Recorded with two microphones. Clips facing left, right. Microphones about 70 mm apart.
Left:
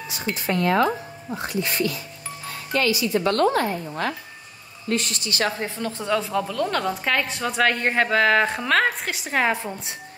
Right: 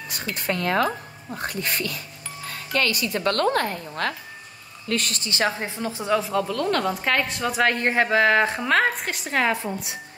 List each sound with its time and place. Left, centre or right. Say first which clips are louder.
0.1 s a woman's voice: left 2 dB; right
5.2 s a woman's voice: even; right; by 9.5 s centre
9.5 s speech: even; left